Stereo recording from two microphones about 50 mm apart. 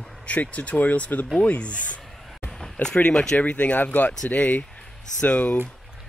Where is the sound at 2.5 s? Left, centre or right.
Centre; by 5.6 s left.